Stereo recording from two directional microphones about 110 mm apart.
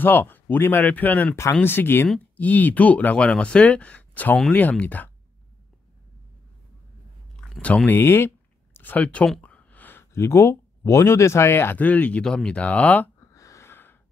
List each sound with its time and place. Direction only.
0.0 s speech: 20° left (ahead or behind)
7.3 s speech: 5° left (ahead or behind)
13.2 s a sound: 30° left (ahead or behind)